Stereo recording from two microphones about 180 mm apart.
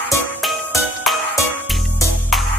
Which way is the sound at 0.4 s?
Centre (ahead or behind).